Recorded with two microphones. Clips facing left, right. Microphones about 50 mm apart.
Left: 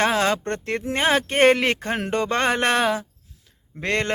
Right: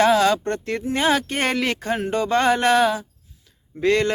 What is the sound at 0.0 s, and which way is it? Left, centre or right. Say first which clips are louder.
Speech: right 4 dB; left.